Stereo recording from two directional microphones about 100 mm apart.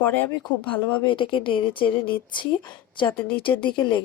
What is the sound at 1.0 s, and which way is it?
Speech, 55° left (ahead or behind).